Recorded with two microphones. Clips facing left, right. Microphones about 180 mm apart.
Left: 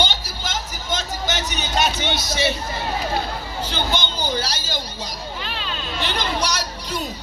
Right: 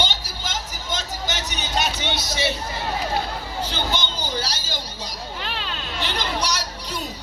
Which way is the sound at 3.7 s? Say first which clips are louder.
Left 4 dB; 55° left (ahead or behind).